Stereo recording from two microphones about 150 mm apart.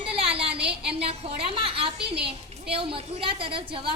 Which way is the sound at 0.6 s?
90° right.